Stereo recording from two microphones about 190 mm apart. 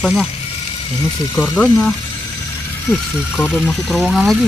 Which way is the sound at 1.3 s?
10° left (ahead or behind).